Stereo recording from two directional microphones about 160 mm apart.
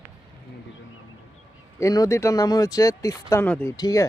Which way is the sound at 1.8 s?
20° left (ahead or behind).